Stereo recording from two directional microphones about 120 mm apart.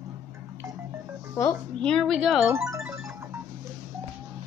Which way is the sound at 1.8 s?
5° left (ahead or behind).